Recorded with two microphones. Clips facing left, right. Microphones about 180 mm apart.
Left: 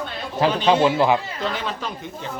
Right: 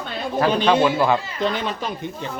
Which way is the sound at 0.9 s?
15° left (ahead or behind).